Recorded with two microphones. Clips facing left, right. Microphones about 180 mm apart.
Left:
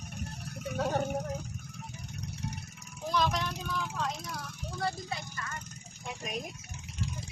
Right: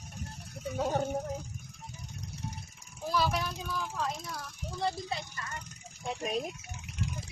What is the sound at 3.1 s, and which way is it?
Speech, 10° right (ahead or behind).